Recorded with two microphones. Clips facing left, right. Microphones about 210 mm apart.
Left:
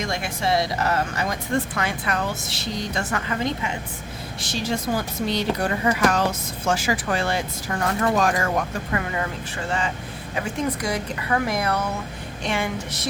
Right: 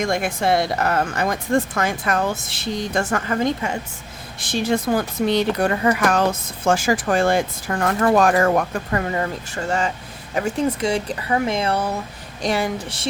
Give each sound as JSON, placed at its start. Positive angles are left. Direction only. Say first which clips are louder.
{"t": 0.0, "sound": "a woman's voice", "louder": "right 5 dB", "side_deg": -50}
{"t": 10.7, "sound": "speech", "louder": "right 4 dB", "side_deg": -25}
{"t": 12.4, "sound": "a sound", "louder": "right 4 dB", "side_deg": -35}